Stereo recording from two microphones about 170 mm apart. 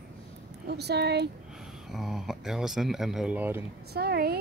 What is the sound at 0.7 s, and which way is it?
Speech, 75° right (ahead or behind).